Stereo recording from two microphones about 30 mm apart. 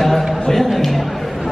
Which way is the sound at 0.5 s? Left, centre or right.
Centre.